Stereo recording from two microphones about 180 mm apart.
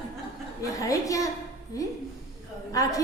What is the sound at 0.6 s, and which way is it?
Speech, 20° left (ahead or behind).